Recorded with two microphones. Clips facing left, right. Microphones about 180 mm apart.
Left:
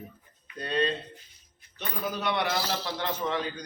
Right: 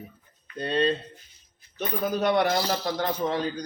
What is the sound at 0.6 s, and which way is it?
Speech, 30° right (ahead or behind).